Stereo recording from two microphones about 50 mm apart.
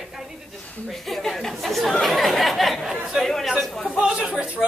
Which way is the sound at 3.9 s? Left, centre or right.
Centre.